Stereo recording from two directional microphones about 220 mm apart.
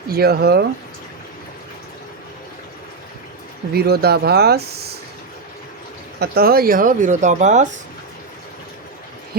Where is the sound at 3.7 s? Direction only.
45° right (ahead or behind).